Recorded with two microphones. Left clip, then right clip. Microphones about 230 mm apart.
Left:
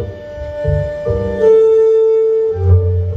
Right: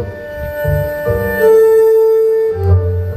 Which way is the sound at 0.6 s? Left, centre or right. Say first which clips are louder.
Right 2 dB; right.